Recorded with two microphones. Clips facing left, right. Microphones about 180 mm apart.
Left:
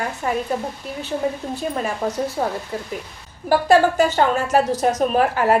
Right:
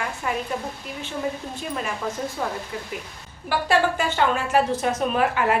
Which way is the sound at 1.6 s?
40° left (ahead or behind).